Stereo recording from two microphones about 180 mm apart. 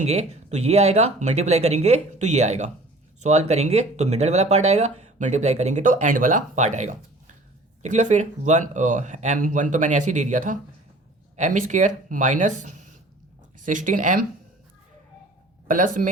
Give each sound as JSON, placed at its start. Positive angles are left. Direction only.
{"t": 0.0, "sound": "speech", "side_deg": -40}
{"t": 15.6, "sound": "a man's voice", "side_deg": -50}